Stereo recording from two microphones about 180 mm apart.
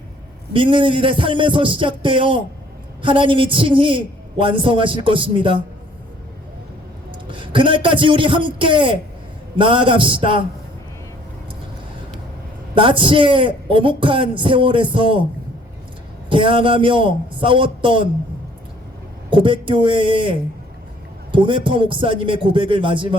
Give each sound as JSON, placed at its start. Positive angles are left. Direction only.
{"t": 0.5, "sound": "speech", "side_deg": -30}
{"t": 7.3, "sound": "speech", "side_deg": -30}
{"t": 12.7, "sound": "speech", "side_deg": -30}
{"t": 16.3, "sound": "speech", "side_deg": -30}
{"t": 19.3, "sound": "speech", "side_deg": -30}
{"t": 21.3, "sound": "speech", "side_deg": -30}